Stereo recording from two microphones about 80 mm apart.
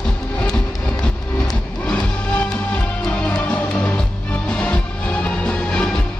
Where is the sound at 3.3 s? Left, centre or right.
Centre.